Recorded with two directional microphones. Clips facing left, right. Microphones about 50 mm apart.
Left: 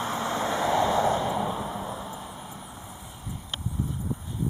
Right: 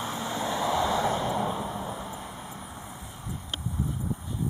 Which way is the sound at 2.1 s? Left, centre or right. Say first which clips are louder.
Even; right.